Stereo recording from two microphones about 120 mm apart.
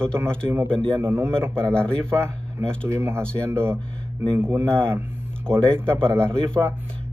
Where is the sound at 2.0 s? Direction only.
20° right (ahead or behind).